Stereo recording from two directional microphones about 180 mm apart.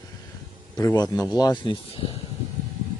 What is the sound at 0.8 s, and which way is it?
Speech, 20° left (ahead or behind).